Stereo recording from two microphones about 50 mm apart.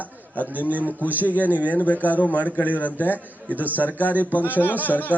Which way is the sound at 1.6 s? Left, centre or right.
Left.